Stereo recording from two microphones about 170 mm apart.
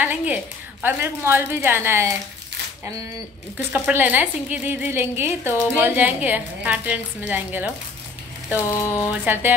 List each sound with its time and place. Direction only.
0.0 s a woman's voice: 10° right (ahead or behind)
3.5 s a woman's voice: 10° right (ahead or behind)
8.8 s speech: 15° left (ahead or behind)
9.1 s a woman's voice: 10° right (ahead or behind)